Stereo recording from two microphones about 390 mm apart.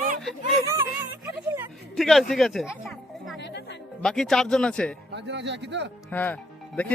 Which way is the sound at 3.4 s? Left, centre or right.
Left.